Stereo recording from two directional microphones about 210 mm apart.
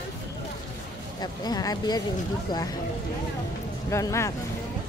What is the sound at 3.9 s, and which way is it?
Speech, 15° left (ahead or behind).